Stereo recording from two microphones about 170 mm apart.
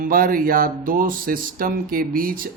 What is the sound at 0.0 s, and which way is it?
Speech, 55° right (ahead or behind).